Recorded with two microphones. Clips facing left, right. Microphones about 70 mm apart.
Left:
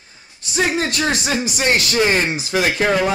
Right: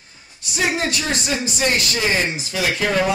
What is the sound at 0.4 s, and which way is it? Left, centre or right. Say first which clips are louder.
Speech: left 2 dB; left.